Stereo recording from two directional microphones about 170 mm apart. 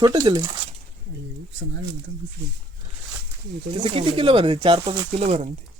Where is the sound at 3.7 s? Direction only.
30° right (ahead or behind).